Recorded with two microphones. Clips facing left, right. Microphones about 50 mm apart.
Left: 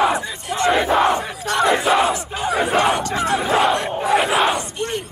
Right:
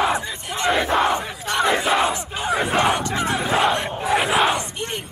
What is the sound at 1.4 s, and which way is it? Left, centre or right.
Crowd, centre.